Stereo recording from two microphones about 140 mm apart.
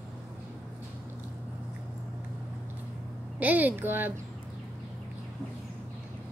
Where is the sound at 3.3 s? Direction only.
10° right (ahead or behind).